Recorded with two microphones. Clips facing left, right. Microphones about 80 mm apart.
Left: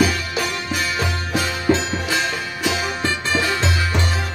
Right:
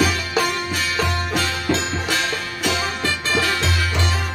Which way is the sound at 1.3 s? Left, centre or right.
Centre.